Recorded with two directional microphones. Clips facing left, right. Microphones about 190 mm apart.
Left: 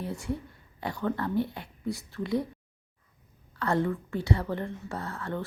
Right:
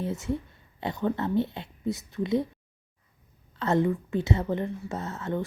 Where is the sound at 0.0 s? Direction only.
20° right (ahead or behind).